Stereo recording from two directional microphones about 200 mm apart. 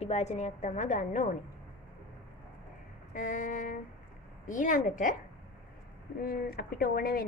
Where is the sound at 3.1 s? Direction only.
40° left (ahead or behind).